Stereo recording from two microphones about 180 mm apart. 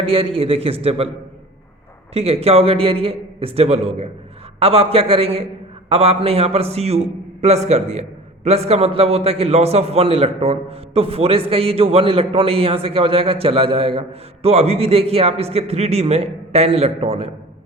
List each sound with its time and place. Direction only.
0.0 s a man's voice: 30° right (ahead or behind)
2.1 s a man's voice: 35° right (ahead or behind)